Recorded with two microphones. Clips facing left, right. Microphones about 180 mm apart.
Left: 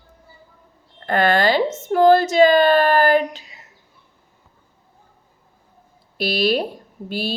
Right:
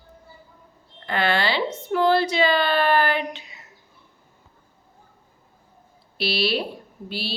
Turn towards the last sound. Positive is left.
turn(degrees=45)  # may be behind; listen again after turning